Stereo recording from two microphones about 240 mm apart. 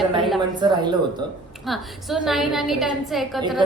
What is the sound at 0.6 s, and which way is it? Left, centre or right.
Speech, centre.